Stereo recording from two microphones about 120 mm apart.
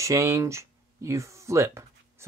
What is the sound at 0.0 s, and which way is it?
Speech, 25° right (ahead or behind).